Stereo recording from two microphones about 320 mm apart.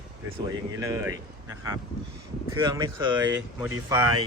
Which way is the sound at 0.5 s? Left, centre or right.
Centre.